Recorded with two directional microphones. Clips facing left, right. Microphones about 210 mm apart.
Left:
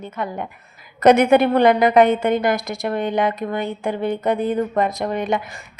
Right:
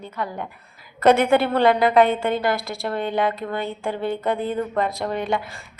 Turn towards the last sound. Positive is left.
turn(degrees=20)  # may be behind; listen again after turning